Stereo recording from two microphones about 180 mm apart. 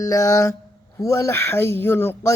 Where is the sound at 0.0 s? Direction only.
15° left (ahead or behind).